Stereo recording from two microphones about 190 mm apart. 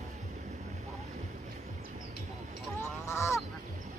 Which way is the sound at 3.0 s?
15° left (ahead or behind).